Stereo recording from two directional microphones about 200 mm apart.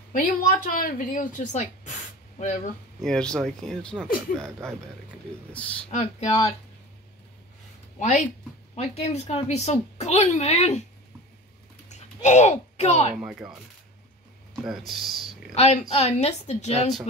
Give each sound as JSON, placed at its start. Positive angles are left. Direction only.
{"t": 0.1, "sound": "a woman's voice", "side_deg": 45}
{"t": 3.0, "sound": "speech", "side_deg": 5}
{"t": 5.9, "sound": "a woman's voice", "side_deg": 35}
{"t": 8.0, "sound": "a woman's voice", "side_deg": 40}
{"t": 11.9, "sound": "speech", "side_deg": 35}
{"t": 13.1, "sound": "speech", "side_deg": -5}
{"t": 15.5, "sound": "a woman's voice", "side_deg": 30}